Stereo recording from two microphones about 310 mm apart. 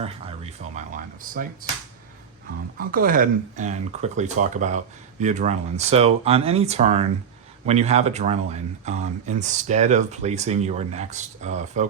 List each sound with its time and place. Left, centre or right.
0.8 s speech: right
2.7 s speech: right